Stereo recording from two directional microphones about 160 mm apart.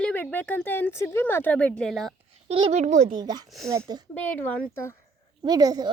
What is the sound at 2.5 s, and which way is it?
Speech, 40° right (ahead or behind).